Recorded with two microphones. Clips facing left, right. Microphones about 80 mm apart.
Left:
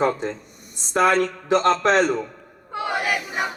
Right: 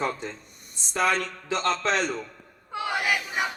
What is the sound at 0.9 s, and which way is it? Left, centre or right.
Speech, left.